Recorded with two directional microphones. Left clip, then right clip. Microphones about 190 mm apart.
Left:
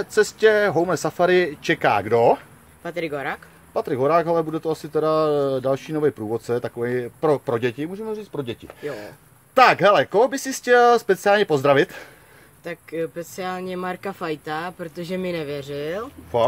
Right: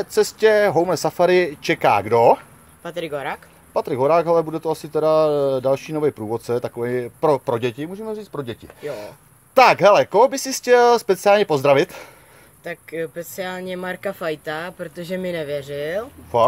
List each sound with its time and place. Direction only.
0.0 s speech: 15° right (ahead or behind)
2.8 s speech: centre (ahead or behind)
3.7 s speech: 20° right (ahead or behind)
12.6 s speech: centre (ahead or behind)